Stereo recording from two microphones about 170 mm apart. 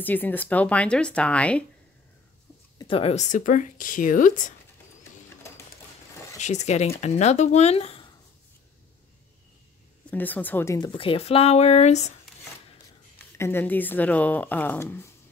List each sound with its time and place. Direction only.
0.0 s speech: 10° left (ahead or behind)
2.8 s speech: 35° left (ahead or behind); by 4.6 s 50° left (ahead or behind)
6.4 s speech: 45° left (ahead or behind)
10.1 s speech: 10° left (ahead or behind)
10.9 s speech: 30° left (ahead or behind)
13.2 s speech: 10° left (ahead or behind)